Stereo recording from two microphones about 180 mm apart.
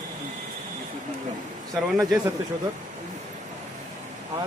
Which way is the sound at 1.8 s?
Centre (ahead or behind).